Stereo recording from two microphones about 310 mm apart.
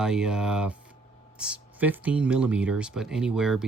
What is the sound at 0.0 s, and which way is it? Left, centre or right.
Speech, centre.